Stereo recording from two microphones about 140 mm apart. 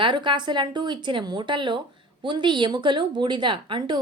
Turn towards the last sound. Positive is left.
turn(degrees=-35)  # may be behind; listen again after turning